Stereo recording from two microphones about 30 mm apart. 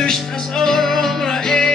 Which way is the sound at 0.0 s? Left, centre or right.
Centre.